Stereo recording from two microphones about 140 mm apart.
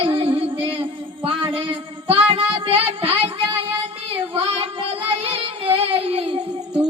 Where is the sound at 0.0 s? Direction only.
40° right (ahead or behind).